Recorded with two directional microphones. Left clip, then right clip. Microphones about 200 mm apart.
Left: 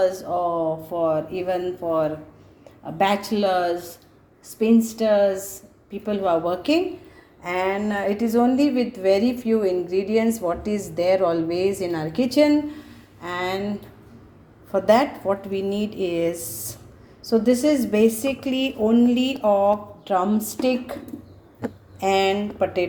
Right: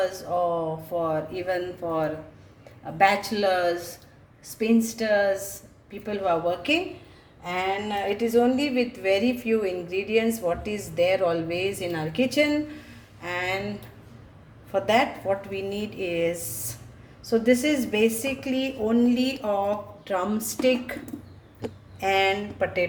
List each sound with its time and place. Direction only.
0.0 s a woman's voice: 25° left (ahead or behind)
7.8 s a woman's voice: 30° left (ahead or behind)
14.7 s a woman's voice: 25° left (ahead or behind)
22.0 s a woman's voice: 20° left (ahead or behind)